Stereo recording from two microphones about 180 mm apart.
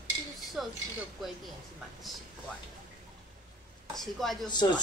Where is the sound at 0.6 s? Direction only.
Centre (ahead or behind).